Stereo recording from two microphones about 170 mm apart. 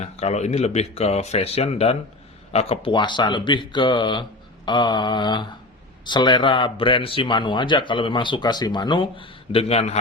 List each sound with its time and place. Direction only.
0.0 s speech: 40° left (ahead or behind)